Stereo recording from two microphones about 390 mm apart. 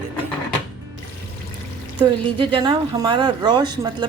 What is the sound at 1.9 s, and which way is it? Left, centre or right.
Speech, centre.